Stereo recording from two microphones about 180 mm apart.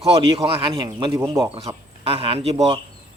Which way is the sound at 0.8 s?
15° right (ahead or behind).